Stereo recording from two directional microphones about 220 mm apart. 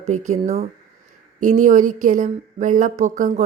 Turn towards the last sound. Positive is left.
turn(degrees=-35)  # may be behind; listen again after turning